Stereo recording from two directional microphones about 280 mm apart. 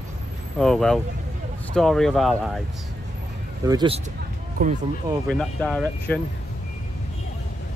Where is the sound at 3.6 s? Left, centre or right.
Centre.